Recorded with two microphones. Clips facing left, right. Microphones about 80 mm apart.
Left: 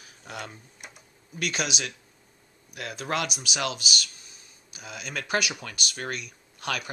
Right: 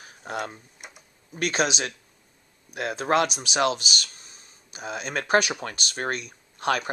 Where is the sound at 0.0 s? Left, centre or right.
Right.